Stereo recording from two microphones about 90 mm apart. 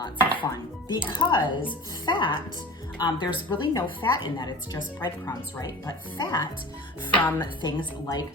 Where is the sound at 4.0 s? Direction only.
55° left (ahead or behind).